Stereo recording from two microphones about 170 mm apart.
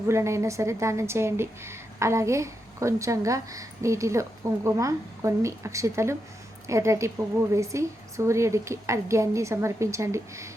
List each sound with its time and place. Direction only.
0.1 s a woman's voice: 15° right (ahead or behind)